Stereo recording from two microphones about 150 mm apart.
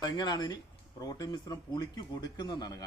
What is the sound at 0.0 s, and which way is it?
Speech, 25° left (ahead or behind).